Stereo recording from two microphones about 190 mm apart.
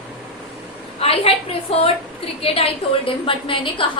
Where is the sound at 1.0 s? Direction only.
30° left (ahead or behind).